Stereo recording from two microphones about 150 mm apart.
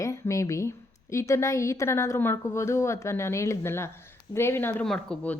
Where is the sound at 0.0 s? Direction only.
20° left (ahead or behind).